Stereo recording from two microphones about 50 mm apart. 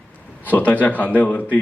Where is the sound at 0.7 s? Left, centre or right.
Left.